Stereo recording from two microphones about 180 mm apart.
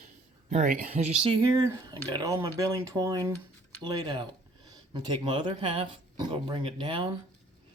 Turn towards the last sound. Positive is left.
turn(degrees=-25)  # may be behind; listen again after turning